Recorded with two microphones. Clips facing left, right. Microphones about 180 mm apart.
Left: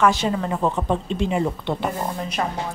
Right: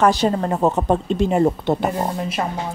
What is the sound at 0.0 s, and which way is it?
A woman's voice, 40° right (ahead or behind).